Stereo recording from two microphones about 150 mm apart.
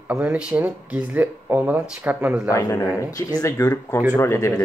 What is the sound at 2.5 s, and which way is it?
Speech, 20° left (ahead or behind).